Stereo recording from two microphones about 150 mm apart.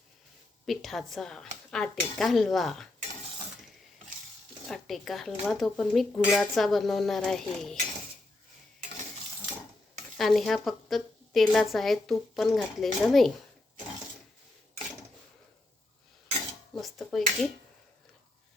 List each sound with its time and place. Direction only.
0.6 s a woman's voice: centre (ahead or behind)
4.6 s a woman's voice: centre (ahead or behind)
10.2 s a woman's voice: centre (ahead or behind)
16.7 s dishes: centre (ahead or behind)